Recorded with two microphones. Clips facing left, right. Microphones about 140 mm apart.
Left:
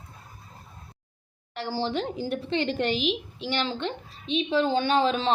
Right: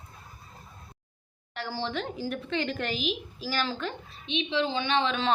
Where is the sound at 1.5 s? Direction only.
30° left (ahead or behind).